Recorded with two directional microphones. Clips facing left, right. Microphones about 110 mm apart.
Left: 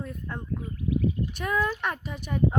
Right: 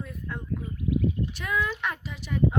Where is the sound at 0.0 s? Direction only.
40° left (ahead or behind).